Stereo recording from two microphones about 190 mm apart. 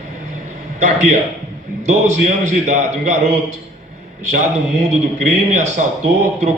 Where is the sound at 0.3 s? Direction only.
40° right (ahead or behind).